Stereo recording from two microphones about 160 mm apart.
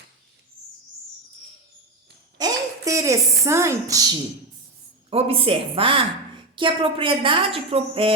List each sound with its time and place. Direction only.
2.4 s a woman's voice: 20° right (ahead or behind)
5.1 s a woman's voice: 35° right (ahead or behind)